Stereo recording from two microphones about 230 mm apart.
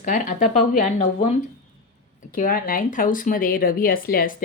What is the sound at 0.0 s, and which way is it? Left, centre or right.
Speech, left.